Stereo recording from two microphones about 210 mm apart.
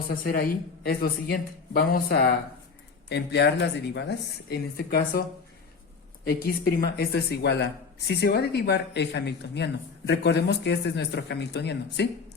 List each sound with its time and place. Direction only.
0.1 s speech: 45° left (ahead or behind)
6.2 s speech: 45° left (ahead or behind)